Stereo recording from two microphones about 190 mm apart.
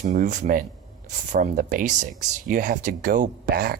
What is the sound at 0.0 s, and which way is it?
Speech, 40° right (ahead or behind).